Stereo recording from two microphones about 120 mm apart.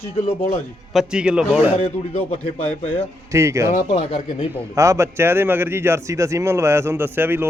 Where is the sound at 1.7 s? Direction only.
60° left (ahead or behind).